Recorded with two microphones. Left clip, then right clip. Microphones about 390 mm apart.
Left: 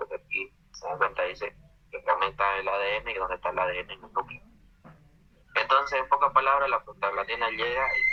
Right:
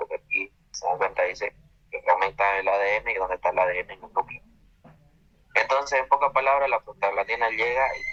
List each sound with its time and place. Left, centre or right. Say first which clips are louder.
0.3 s speech: right 5 dB; centre
5.5 s a man's voice: right 2 dB; centre